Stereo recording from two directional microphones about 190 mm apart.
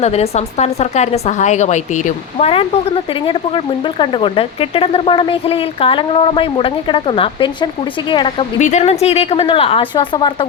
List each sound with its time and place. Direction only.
0.0 s speech: 35° left (ahead or behind)
8.5 s a woman's voice: 35° left (ahead or behind)